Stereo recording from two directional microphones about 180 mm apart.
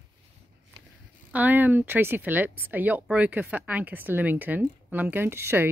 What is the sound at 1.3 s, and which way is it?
Speech, 10° right (ahead or behind).